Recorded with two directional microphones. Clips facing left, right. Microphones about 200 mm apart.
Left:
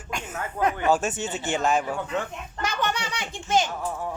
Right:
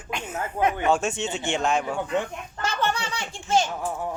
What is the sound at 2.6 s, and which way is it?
A child's voice, 15° left (ahead or behind).